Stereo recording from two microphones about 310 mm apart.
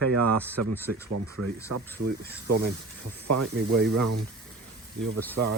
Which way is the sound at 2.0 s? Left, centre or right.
Right.